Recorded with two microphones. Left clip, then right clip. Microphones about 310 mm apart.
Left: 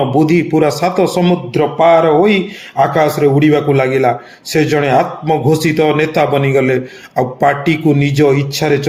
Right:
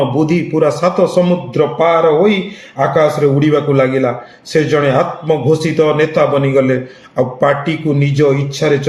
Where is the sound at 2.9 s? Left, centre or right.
Left.